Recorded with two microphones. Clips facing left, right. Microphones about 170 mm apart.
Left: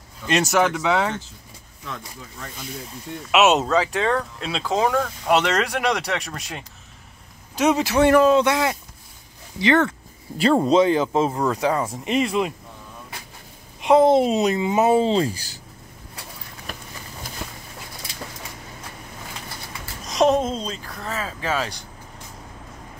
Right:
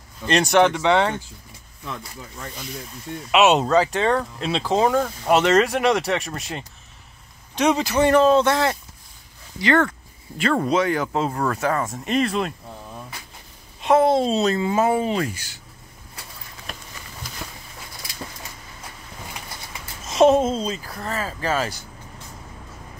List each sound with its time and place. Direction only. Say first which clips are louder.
0.3 s speech: right 3 dB; 5° left (ahead or behind)
3.3 s speech: right 1 dB; centre (ahead or behind); by 11.1 s 25° left (ahead or behind)
11.1 s speech: left 2 dB; 15° left (ahead or behind)
13.7 s speech: left 2 dB; 15° left (ahead or behind); by 15.6 s 35° left (ahead or behind)
20.1 s speech: right 3 dB; 5° right (ahead or behind)